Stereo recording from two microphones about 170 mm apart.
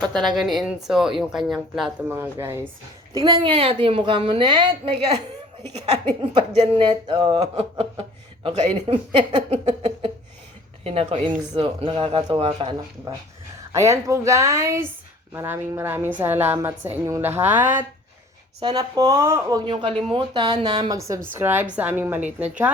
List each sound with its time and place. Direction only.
0.1 s a woman's voice: centre (ahead or behind)
2.0 s a woman's voice: 15° right (ahead or behind)
3.2 s speech: 25° right (ahead or behind)
5.6 s speech: 40° right (ahead or behind)
13.7 s a woman's voice: 15° right (ahead or behind)
21.3 s a woman's voice: 10° right (ahead or behind)